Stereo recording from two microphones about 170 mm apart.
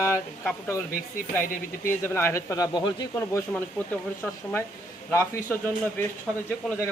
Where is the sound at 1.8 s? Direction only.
15° left (ahead or behind).